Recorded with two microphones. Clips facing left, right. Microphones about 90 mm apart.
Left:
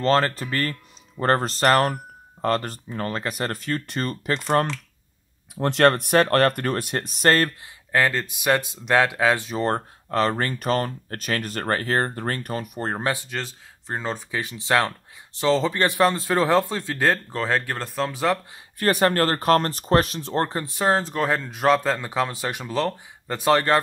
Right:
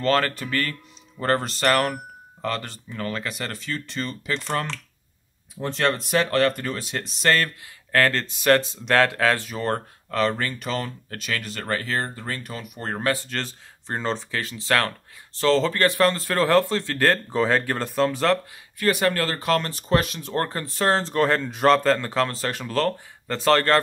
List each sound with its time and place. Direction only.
0.0 s speech: 30° left (ahead or behind)
5.6 s speech: 65° left (ahead or behind); by 7.5 s 40° left (ahead or behind)
7.9 s speech: 15° left (ahead or behind); by 12.9 s 35° left (ahead or behind)
12.9 s speech: 20° left (ahead or behind)
13.3 s speech: 5° left (ahead or behind)
18.8 s speech: 40° left (ahead or behind); by 23.8 s 15° left (ahead or behind)